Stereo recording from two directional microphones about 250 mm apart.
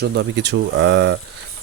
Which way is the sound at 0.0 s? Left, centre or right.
Right.